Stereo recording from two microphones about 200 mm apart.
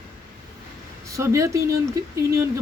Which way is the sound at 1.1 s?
15° right (ahead or behind).